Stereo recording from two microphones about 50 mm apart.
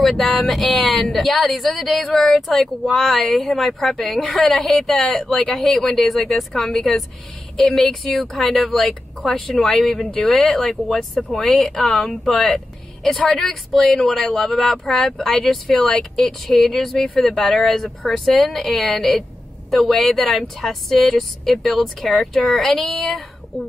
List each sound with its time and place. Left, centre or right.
0.0 s speech: centre
6.6 s speech: centre
7.7 s speech: centre
9.8 s speech: left
10.2 s speech: centre
12.5 s vehicle: centre
13.3 s speech: centre